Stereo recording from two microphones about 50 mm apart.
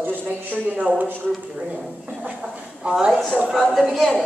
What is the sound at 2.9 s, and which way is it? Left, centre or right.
Speech, centre.